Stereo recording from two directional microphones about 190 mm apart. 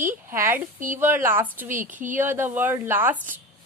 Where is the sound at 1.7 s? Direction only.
45° right (ahead or behind).